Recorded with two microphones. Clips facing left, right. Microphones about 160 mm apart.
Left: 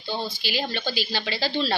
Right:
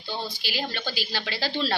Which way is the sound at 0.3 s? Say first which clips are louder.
Left 3 dB; 5° right (ahead or behind).